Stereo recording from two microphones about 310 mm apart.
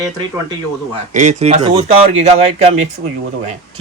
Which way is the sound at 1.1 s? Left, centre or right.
Right.